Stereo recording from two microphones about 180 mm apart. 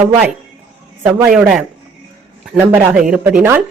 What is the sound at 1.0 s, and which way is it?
Speech, 5° right (ahead or behind).